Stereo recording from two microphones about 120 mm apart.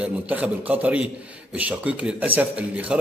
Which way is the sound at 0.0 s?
15° right (ahead or behind).